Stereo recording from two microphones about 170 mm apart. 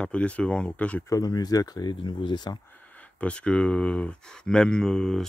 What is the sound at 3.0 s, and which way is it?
Speech, 5° left (ahead or behind).